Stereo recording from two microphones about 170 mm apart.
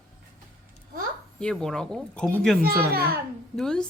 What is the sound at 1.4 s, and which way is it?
Speech, 5° left (ahead or behind).